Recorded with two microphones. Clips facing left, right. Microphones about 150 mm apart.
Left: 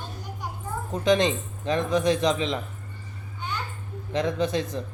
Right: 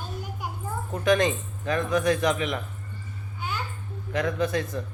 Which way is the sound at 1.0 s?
20° left (ahead or behind).